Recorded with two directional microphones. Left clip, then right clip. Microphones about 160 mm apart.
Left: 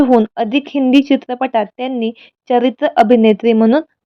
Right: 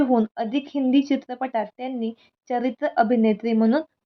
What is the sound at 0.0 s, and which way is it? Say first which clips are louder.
Speech: left 10 dB; 40° left (ahead or behind).